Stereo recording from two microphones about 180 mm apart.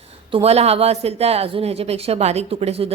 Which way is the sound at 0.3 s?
30° right (ahead or behind).